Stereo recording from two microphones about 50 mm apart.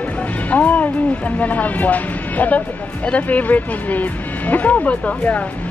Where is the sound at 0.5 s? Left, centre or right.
Left.